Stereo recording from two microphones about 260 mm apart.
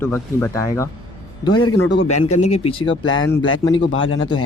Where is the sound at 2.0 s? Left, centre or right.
Left.